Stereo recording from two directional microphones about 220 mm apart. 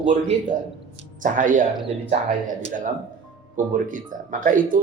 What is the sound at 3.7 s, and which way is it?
Speech, 35° right (ahead or behind).